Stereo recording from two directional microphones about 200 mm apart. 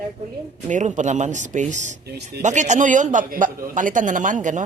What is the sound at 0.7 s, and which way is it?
A man's voice, 35° right (ahead or behind).